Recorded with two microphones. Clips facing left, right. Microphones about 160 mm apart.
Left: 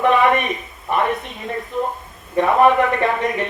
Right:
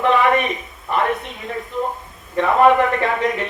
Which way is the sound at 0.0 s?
5° left (ahead or behind).